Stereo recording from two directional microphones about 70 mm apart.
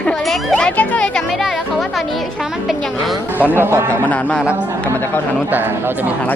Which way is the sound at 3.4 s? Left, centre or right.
Right.